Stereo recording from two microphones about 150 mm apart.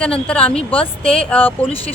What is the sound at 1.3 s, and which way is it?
Speech, 10° left (ahead or behind).